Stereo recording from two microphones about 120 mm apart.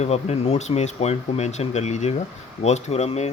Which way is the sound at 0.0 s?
60° left (ahead or behind).